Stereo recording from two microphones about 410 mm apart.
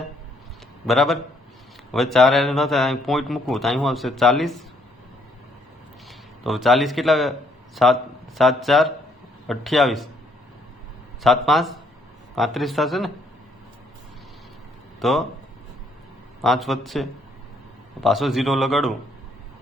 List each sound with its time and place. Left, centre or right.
0.9 s speech: centre
6.1 s speech: centre
11.2 s speech: centre
14.9 s speech: centre
16.4 s speech: centre